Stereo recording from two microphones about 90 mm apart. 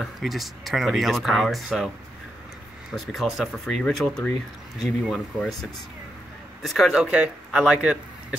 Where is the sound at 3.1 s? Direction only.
Centre (ahead or behind).